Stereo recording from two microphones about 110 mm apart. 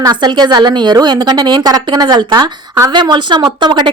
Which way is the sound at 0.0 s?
40° right (ahead or behind).